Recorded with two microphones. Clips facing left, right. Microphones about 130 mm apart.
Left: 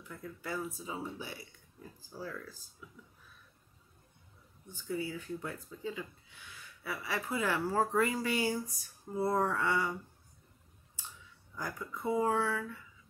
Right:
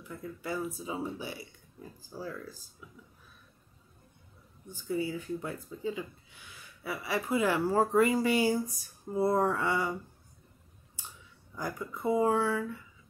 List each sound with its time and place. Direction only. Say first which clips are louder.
0.1 s speech: right 4 dB; 10° right (ahead or behind)
4.7 s speech: right 4 dB; 15° right (ahead or behind)
11.5 s speech: right 4 dB; 10° right (ahead or behind)